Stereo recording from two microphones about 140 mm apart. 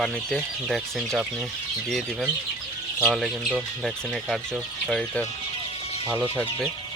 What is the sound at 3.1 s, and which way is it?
Speech, centre (ahead or behind).